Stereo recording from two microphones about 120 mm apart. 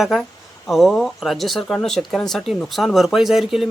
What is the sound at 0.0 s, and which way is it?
Speech, centre (ahead or behind).